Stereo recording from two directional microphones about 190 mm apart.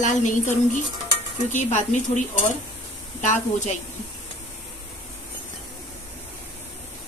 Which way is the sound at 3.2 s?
40° left (ahead or behind).